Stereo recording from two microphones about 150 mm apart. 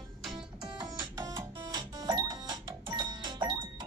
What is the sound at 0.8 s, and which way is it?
Music, 25° right (ahead or behind).